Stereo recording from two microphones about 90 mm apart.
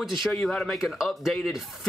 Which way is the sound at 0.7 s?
5° right (ahead or behind).